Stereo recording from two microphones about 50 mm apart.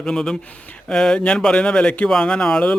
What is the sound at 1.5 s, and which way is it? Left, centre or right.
Mantra, centre.